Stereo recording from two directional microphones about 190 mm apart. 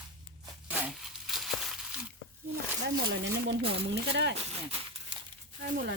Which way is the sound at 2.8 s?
60° right (ahead or behind).